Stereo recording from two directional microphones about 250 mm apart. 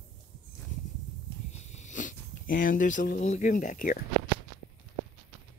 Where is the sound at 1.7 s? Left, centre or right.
Left.